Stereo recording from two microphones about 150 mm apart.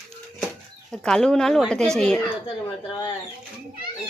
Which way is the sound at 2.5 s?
30° left (ahead or behind).